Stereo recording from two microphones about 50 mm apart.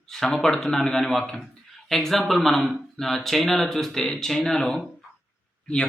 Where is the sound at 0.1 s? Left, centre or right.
Centre.